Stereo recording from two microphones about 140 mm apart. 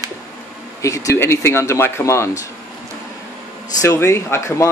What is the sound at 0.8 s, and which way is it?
Speech, 20° left (ahead or behind).